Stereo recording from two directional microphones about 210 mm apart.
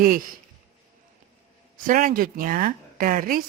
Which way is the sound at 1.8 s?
40° right (ahead or behind).